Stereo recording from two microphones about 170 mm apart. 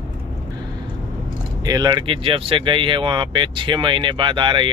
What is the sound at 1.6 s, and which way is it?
Speech, 25° right (ahead or behind).